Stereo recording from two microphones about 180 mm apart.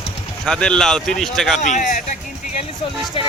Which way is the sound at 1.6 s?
40° left (ahead or behind).